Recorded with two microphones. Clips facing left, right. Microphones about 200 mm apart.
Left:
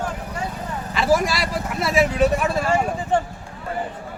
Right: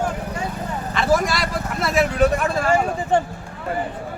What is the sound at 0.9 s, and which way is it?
Speech, 5° left (ahead or behind).